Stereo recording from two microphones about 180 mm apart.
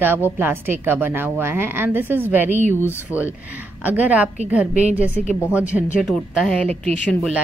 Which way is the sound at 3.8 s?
10° right (ahead or behind).